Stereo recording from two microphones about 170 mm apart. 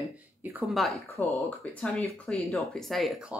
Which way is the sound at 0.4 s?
10° right (ahead or behind).